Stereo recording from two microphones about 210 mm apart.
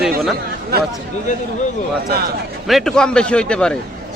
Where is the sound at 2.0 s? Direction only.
45° right (ahead or behind).